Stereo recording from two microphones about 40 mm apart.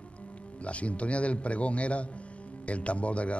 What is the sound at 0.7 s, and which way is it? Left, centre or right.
A woman's voice, left.